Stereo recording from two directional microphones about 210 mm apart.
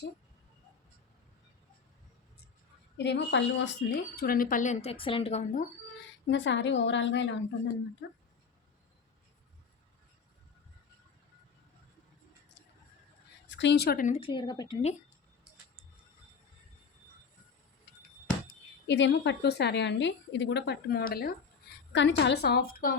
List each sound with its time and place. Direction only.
3.0 s speech: 55° left (ahead or behind); by 5.6 s 30° left (ahead or behind)
6.2 s a woman's voice: 60° left (ahead or behind)
13.5 s a woman's voice: 60° left (ahead or behind); by 14.2 s 40° left (ahead or behind)
14.2 s speech: 25° left (ahead or behind)
18.9 s a woman's voice: 60° left (ahead or behind)
21.9 s a woman's voice: 55° left (ahead or behind)